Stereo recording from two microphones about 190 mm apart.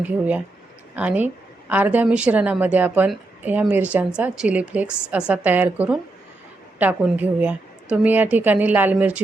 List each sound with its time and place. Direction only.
0.0 s speech: 10° right (ahead or behind)